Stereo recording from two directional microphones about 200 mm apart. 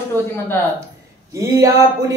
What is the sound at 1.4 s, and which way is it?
Music, 15° right (ahead or behind).